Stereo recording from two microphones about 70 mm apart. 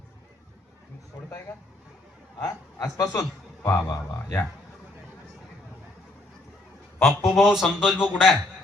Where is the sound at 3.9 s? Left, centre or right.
Left.